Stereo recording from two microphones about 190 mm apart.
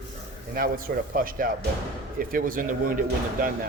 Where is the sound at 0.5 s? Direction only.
50° right (ahead or behind).